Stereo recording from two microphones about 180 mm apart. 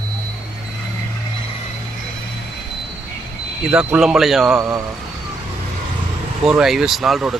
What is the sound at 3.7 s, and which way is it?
Speech, 5° right (ahead or behind).